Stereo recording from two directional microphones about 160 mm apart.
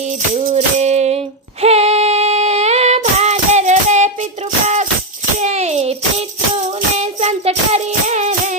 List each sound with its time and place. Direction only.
0.0 s music: 45° right (ahead or behind)
1.6 s female singing: 40° right (ahead or behind)
5.4 s tambourine: 45° right (ahead or behind)
6.7 s music: 45° right (ahead or behind)